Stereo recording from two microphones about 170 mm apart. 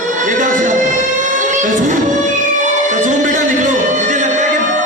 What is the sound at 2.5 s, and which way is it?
Music, 45° right (ahead or behind).